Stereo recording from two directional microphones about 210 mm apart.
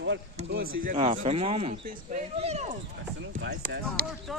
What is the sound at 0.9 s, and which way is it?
Speech, 30° right (ahead or behind).